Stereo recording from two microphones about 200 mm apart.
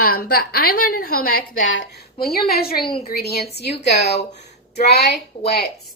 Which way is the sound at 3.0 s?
50° left (ahead or behind).